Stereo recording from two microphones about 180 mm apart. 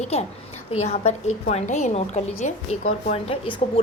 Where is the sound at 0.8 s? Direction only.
40° left (ahead or behind).